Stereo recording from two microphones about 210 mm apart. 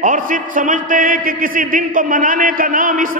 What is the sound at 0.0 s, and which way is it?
A man's voice, 40° right (ahead or behind).